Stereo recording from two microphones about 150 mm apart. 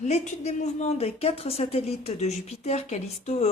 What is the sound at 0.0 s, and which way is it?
A woman's voice, 50° left (ahead or behind).